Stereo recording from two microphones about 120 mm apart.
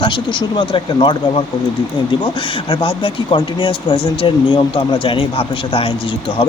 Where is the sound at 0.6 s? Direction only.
40° left (ahead or behind).